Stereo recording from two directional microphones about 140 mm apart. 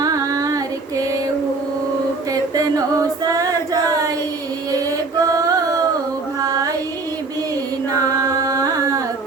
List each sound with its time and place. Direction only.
0.0 s child singing: 25° right (ahead or behind)
2.6 s choir: 25° right (ahead or behind)
5.2 s a sound: 25° right (ahead or behind)
6.4 s music: 25° right (ahead or behind)
7.9 s carnatic music: 25° right (ahead or behind)